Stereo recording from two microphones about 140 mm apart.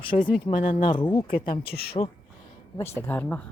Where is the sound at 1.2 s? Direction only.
90° left.